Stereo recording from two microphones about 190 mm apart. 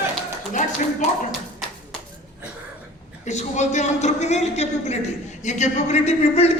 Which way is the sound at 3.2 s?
40° left (ahead or behind).